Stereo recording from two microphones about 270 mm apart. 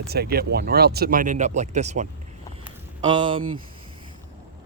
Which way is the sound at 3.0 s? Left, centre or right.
Centre.